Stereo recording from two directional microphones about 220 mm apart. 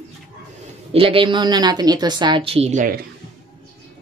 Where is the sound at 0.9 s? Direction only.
25° right (ahead or behind).